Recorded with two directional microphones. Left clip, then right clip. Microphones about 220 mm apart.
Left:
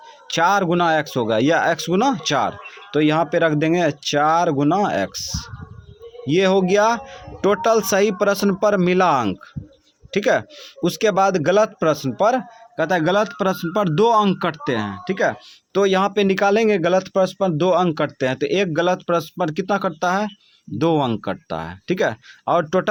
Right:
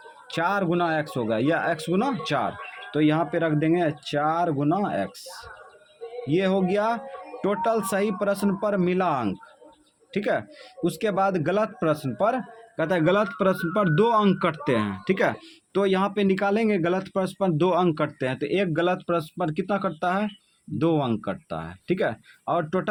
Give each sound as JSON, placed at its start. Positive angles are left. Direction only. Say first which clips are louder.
{"t": 0.3, "sound": "speech", "louder": "left 7 dB", "side_deg": 30}
{"t": 15.7, "sound": "speech", "louder": "left 6 dB", "side_deg": 25}